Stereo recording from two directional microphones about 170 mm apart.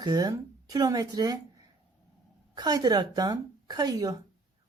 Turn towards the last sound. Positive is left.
turn(degrees=-20)  # may be behind; listen again after turning